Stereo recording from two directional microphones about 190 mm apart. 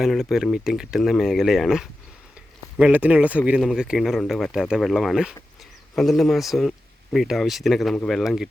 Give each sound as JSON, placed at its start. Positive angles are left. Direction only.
{"t": 0.0, "sound": "speech", "side_deg": 0}